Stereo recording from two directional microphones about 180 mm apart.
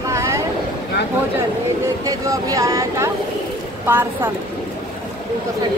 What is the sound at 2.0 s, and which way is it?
Speech, 20° right (ahead or behind).